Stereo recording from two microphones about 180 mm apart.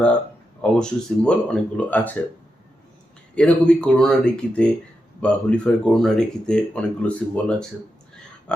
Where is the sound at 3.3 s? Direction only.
5° left (ahead or behind).